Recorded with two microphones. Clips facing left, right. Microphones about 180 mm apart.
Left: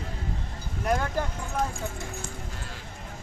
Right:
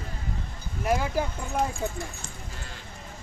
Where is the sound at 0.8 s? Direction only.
5° right (ahead or behind).